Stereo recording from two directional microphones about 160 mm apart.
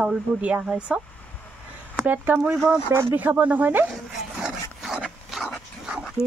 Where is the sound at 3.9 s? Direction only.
5° right (ahead or behind).